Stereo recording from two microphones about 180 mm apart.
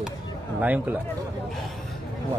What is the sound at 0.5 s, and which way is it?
Speech, 10° right (ahead or behind).